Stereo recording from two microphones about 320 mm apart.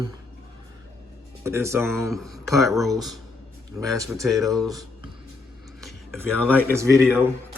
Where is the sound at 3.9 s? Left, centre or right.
Centre.